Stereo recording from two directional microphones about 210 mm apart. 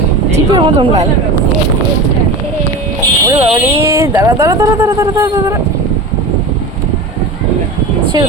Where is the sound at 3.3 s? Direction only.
15° right (ahead or behind).